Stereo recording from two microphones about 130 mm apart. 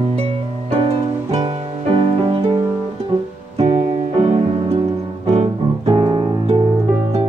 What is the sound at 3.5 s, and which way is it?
Music, 55° right (ahead or behind).